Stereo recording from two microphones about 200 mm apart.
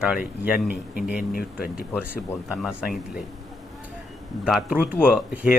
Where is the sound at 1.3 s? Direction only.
45° left (ahead or behind).